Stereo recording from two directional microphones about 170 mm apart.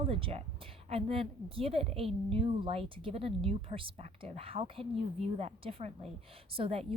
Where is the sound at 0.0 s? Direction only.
30° right (ahead or behind).